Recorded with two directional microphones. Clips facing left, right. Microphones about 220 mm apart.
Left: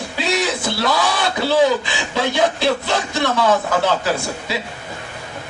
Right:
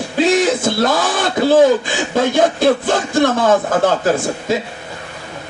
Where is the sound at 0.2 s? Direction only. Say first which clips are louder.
Right 8 dB; 50° right (ahead or behind).